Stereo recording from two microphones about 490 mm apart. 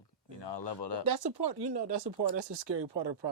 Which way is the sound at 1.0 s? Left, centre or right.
Right.